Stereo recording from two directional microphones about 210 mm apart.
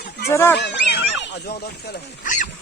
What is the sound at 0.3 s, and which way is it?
Speech, 15° left (ahead or behind).